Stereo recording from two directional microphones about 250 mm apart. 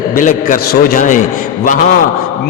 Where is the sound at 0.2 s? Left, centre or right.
Left.